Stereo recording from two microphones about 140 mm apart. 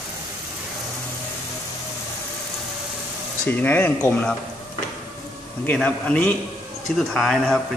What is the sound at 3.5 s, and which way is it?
Speech, 15° left (ahead or behind).